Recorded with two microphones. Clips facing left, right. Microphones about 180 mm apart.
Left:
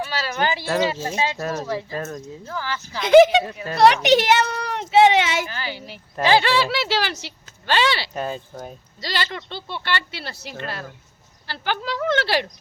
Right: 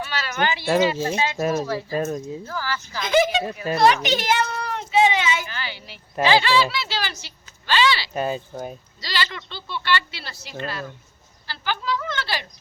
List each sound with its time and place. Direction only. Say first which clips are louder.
0.0 s speech: left 1 dB; 35° left (ahead or behind)
0.6 s speech: right 5 dB; 15° right (ahead or behind)
1.0 s speech: right 1 dB; 25° left (ahead or behind)
1.4 s speech: right 3 dB; 15° right (ahead or behind)
2.4 s speech: even; 20° left (ahead or behind)
3.0 s speech: left 8 dB; 70° left (ahead or behind)
3.8 s a sound: left 4 dB; 75° left (ahead or behind)
5.5 s speech: left 3 dB; 40° left (ahead or behind)
8.1 s speech: right 3 dB; 5° right (ahead or behind)
9.0 s speech: left 2 dB; 50° left (ahead or behind)